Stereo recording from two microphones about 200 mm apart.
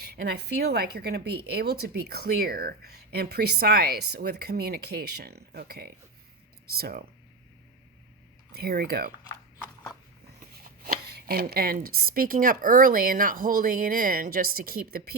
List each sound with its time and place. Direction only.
0.0 s speech: 55° right (ahead or behind)
8.5 s speech: 50° right (ahead or behind)
11.3 s speech: 50° right (ahead or behind)